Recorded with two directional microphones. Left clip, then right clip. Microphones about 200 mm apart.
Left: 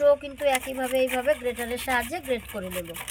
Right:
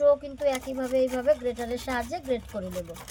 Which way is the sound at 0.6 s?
5° right (ahead or behind).